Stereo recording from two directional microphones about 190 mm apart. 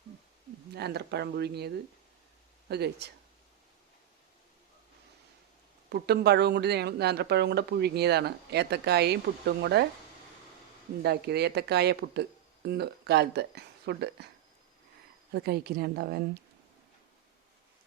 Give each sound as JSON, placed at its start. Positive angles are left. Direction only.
{"t": 0.7, "sound": "speech", "side_deg": -60}
{"t": 5.9, "sound": "speech", "side_deg": -60}
{"t": 11.0, "sound": "speech", "side_deg": -60}
{"t": 15.3, "sound": "speech", "side_deg": -55}